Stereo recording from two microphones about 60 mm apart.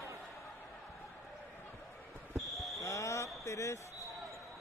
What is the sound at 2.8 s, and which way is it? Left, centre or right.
Speech, left.